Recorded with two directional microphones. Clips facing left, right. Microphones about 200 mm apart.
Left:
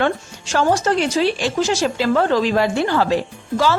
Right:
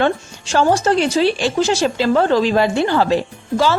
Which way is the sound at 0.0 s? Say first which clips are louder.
Right 2 dB; 30° right (ahead or behind).